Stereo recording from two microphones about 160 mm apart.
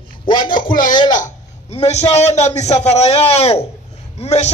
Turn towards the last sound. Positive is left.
turn(degrees=45)  # may be behind; listen again after turning